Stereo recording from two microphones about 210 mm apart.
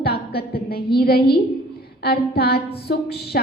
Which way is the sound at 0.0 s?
50° left (ahead or behind).